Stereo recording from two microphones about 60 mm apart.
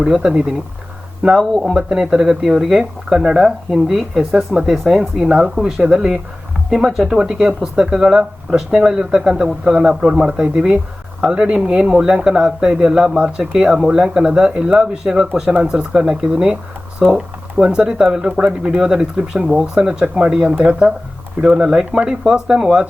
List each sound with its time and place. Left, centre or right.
0.0 s speech: centre
1.6 s speech: centre
15.4 s speech: right
15.7 s speech: centre